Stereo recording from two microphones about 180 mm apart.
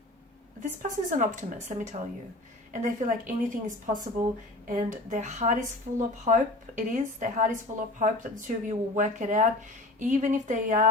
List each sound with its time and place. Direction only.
0.6 s a woman's voice: 45° right (ahead or behind)